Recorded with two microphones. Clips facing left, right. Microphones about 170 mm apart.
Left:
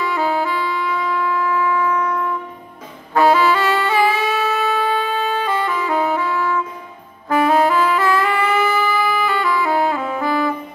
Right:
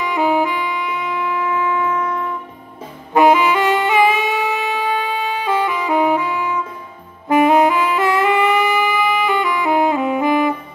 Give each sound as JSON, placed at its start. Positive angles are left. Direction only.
{"t": 0.0, "sound": "saxophone", "side_deg": -15}
{"t": 3.2, "sound": "wind instrument", "side_deg": -20}
{"t": 7.2, "sound": "saxophone", "side_deg": -20}